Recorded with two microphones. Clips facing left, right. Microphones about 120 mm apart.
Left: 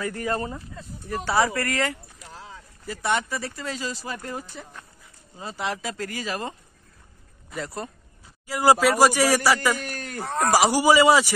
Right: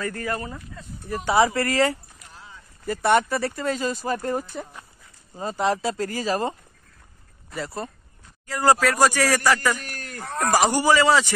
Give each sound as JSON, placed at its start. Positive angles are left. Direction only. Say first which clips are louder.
{"t": 0.0, "sound": "a man's voice", "louder": "even", "side_deg": 15}
{"t": 0.3, "sound": "speech", "louder": "left 2 dB", "side_deg": 30}
{"t": 1.0, "sound": "speech", "louder": "right 3 dB", "side_deg": -15}
{"t": 2.1, "sound": "a sound", "louder": "left 4 dB", "side_deg": 90}
{"t": 2.9, "sound": "speech", "louder": "right 6 dB", "side_deg": -55}
{"t": 7.5, "sound": "speech", "louder": "right 1 dB", "side_deg": 0}
{"t": 8.5, "sound": "a man's voice", "louder": "left 1 dB", "side_deg": 10}
{"t": 10.2, "sound": "a man's voice", "louder": "left 1 dB", "side_deg": 0}